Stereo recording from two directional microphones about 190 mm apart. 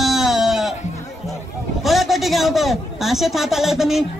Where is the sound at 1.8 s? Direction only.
Centre (ahead or behind).